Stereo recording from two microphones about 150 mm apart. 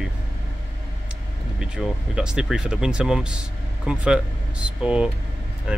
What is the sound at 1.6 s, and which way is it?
Speech, 5° right (ahead or behind).